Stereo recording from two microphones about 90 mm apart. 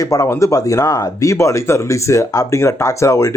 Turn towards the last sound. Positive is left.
turn(degrees=35)  # may be behind; listen again after turning